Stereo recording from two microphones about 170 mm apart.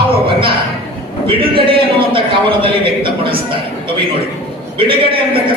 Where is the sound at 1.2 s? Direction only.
30° right (ahead or behind).